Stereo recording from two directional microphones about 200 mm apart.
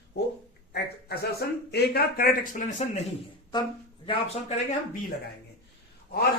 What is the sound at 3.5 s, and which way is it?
Speech, 25° left (ahead or behind).